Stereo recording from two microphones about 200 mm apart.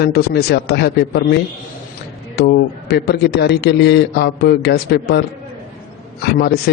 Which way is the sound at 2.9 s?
55° left (ahead or behind).